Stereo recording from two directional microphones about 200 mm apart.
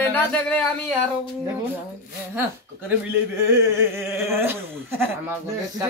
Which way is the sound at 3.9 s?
10° right (ahead or behind).